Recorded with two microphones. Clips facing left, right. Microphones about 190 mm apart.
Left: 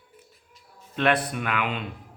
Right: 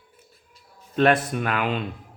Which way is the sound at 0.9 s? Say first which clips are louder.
Right 4 dB; 45° right (ahead or behind).